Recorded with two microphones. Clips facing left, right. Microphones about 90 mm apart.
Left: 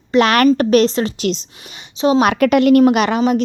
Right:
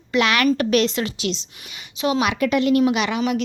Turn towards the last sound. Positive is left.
turn(degrees=35)  # may be behind; listen again after turning